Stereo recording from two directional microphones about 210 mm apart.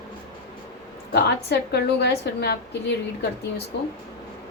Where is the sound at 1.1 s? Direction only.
50° left (ahead or behind).